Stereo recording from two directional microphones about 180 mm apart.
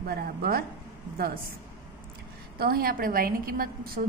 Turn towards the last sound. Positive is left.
turn(degrees=-55)  # may be behind; listen again after turning